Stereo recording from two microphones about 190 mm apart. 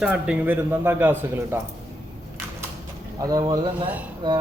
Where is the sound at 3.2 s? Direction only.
20° right (ahead or behind).